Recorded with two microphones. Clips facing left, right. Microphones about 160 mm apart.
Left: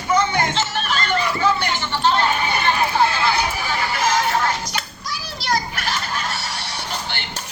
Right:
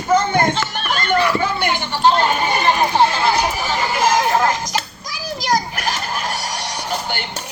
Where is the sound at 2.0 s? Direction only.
45° right (ahead or behind).